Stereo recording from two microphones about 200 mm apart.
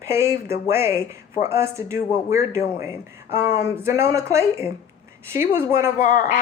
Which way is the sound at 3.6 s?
15° right (ahead or behind).